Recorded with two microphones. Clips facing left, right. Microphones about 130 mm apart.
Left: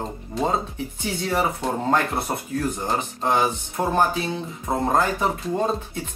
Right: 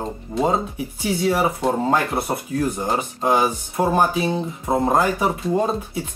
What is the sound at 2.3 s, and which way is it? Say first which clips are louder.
Speech: right 3 dB; 20° right (ahead or behind).